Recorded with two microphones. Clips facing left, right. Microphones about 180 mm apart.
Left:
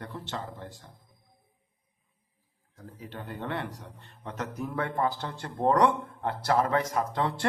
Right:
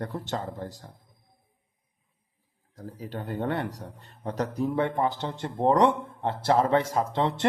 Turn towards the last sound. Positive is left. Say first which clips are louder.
# right 3 dB
turn(degrees=-20)  # may be behind; listen again after turning